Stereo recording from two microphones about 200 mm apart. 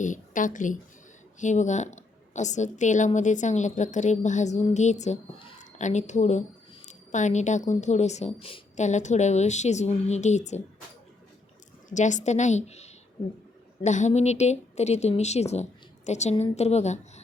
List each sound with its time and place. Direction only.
0.0 s a woman's voice: 40° left (ahead or behind)
11.9 s a woman's voice: 35° left (ahead or behind)